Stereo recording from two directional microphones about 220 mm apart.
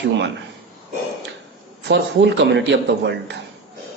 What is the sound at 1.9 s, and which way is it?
A man's voice, 50° right (ahead or behind).